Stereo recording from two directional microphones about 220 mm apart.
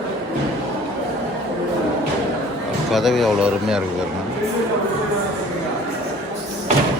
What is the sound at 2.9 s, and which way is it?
Speech, centre (ahead or behind).